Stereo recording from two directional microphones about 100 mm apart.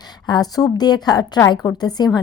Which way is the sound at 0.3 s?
40° left (ahead or behind).